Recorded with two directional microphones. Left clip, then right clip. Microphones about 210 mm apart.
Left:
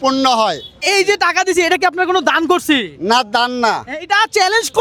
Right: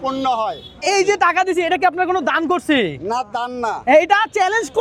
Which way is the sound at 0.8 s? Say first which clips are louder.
Left 2 dB; 15° left (ahead or behind).